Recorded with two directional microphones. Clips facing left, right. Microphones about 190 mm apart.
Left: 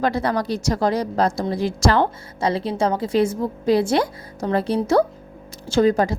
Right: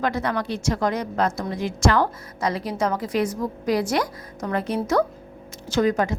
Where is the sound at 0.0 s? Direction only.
35° left (ahead or behind).